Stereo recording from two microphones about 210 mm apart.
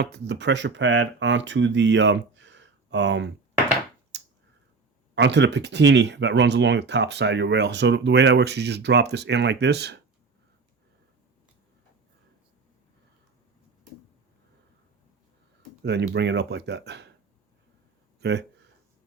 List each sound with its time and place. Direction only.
0.0 s speech: 55° right (ahead or behind)
4.1 s a sound: 55° right (ahead or behind)
5.1 s speech: 55° right (ahead or behind)
15.8 s speech: 55° right (ahead or behind)
18.2 s speech: 55° right (ahead or behind)